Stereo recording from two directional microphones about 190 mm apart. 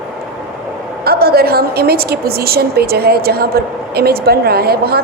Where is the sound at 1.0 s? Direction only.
55° right (ahead or behind).